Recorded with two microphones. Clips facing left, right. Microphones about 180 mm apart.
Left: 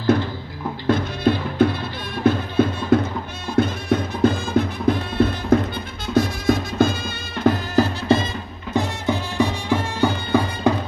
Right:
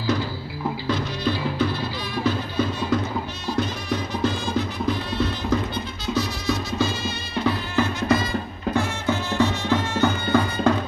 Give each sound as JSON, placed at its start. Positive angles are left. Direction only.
{"t": 0.8, "sound": "music", "side_deg": 55}
{"t": 8.7, "sound": "music", "side_deg": 15}